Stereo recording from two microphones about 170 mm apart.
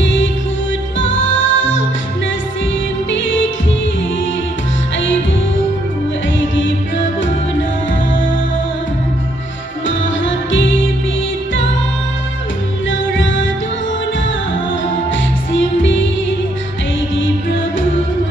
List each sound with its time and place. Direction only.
0.0 s music: 90° left
3.1 s music: 90° left
6.5 s music: 90° left
9.8 s music: 90° left
13.2 s music: 90° left
15.5 s music: 90° left
17.2 s music: 90° left